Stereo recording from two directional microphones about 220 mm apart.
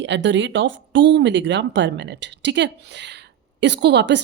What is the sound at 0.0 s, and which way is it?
A woman's voice, 55° right (ahead or behind).